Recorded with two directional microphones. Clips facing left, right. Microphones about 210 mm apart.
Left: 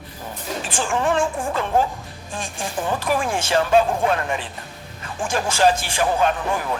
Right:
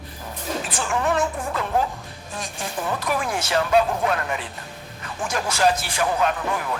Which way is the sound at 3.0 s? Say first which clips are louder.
Left 3 dB; 30° left (ahead or behind).